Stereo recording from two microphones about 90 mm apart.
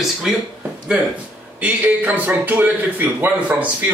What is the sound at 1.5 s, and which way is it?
A man's voice, 20° right (ahead or behind).